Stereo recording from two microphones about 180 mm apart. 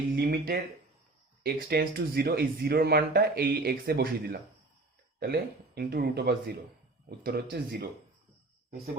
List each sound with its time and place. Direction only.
0.2 s speech: 60° right (ahead or behind)